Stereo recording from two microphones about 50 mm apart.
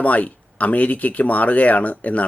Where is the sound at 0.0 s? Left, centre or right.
Left.